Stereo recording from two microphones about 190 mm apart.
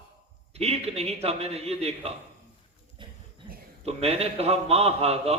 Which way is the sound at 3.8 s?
35° right (ahead or behind).